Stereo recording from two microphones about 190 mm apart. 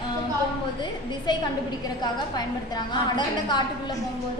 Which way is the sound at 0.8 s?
25° left (ahead or behind).